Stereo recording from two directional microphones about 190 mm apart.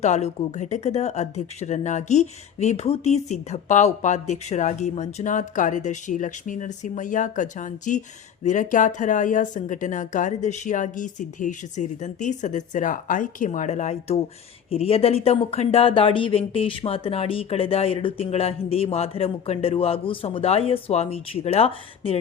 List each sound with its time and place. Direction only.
0.0 s speech: 35° left (ahead or behind)